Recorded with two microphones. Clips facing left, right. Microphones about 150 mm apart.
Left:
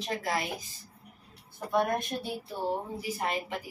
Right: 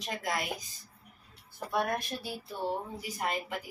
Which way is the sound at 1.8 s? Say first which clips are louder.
Left 2 dB; 20° left (ahead or behind).